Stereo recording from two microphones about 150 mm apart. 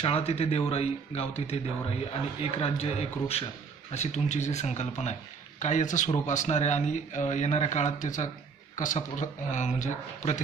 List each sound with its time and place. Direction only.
0.0 s speech: 40° left (ahead or behind)